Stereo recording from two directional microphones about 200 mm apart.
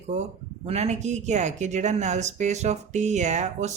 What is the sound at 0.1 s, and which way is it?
Speech, 35° right (ahead or behind).